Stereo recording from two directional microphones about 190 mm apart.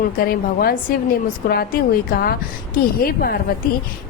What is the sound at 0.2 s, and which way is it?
A woman's voice, 50° left (ahead or behind).